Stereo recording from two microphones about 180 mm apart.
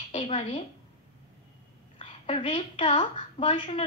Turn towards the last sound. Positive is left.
turn(degrees=35)  # may be behind; listen again after turning